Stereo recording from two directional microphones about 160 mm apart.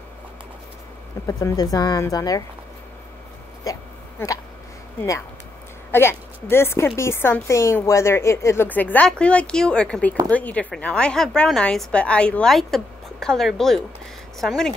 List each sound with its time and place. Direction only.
1.2 s speech: 20° left (ahead or behind)
5.9 s a woman's voice: 15° left (ahead or behind)